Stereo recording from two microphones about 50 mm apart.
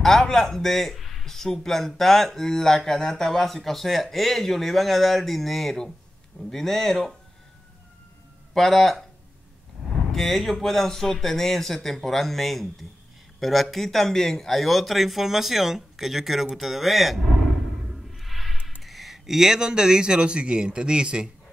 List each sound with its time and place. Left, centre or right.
0.0 s a man's voice: centre
8.5 s a man's voice: centre
10.1 s a man's voice: centre
17.9 s music: centre
18.8 s a man's voice: centre